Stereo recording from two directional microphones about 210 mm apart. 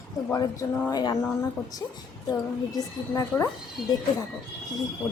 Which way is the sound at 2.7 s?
15° left (ahead or behind).